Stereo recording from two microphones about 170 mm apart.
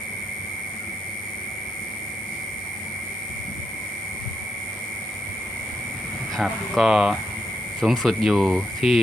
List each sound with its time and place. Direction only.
6.3 s speech: centre (ahead or behind)
8.8 s speech: 35° left (ahead or behind)